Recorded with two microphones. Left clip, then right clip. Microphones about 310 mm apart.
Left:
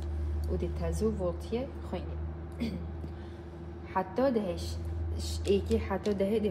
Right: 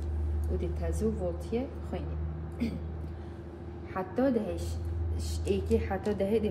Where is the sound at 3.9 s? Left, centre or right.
Left.